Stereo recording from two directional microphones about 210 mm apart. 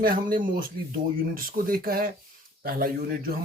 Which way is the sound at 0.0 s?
40° right (ahead or behind).